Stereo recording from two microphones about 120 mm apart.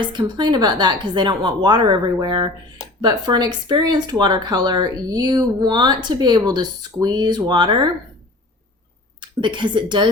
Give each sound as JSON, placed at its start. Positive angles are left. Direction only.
{"t": 0.0, "sound": "speech", "side_deg": -40}
{"t": 9.2, "sound": "speech", "side_deg": -40}